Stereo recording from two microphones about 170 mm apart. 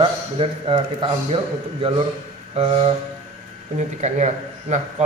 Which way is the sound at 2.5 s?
35° right (ahead or behind).